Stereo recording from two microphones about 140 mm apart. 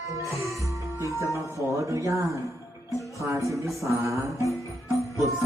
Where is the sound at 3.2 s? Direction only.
20° right (ahead or behind).